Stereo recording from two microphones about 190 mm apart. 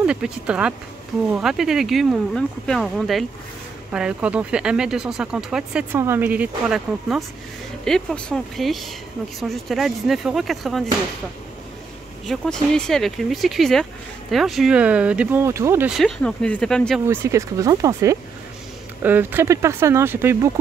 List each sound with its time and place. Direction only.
0.0 s speech: 5° right (ahead or behind)
12.3 s speech: centre (ahead or behind); by 15.9 s 15° right (ahead or behind)
15.9 s speech: 5° left (ahead or behind)
17.0 s speech: 15° right (ahead or behind)